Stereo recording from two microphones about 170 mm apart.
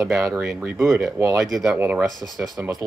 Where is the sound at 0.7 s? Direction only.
15° right (ahead or behind).